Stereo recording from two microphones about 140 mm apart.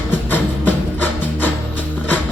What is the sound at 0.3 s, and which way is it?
Music, 15° left (ahead or behind).